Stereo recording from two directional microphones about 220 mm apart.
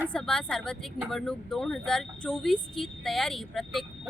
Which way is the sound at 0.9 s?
Centre (ahead or behind).